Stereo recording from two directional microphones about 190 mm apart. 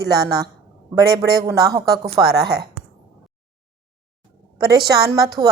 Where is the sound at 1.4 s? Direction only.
20° right (ahead or behind).